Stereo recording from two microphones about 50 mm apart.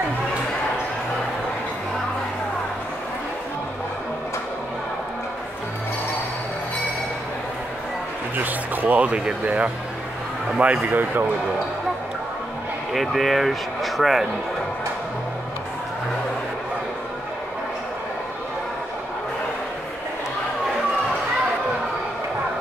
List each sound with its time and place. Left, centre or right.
8.4 s a sound: right
9.4 s speech: right
12.9 s speech: centre